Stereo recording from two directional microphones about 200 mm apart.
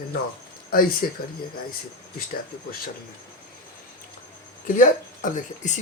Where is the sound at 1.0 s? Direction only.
45° left (ahead or behind).